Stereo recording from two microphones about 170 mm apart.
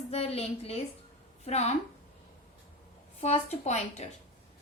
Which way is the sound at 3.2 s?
40° left (ahead or behind).